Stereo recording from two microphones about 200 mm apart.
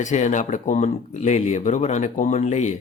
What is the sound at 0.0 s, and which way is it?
A man's voice, 35° left (ahead or behind).